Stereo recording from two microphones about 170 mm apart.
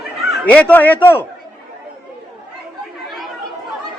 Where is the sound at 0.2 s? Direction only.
5° left (ahead or behind).